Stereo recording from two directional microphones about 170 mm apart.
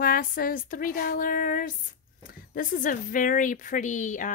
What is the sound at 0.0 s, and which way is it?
Speech, 55° left (ahead or behind).